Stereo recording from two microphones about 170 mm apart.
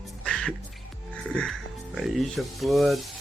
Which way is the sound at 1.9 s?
Centre (ahead or behind).